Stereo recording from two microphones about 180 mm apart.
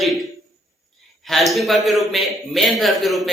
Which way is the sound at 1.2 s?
Centre (ahead or behind).